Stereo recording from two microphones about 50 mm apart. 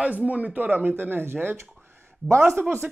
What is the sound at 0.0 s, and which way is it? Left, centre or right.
Speech, right.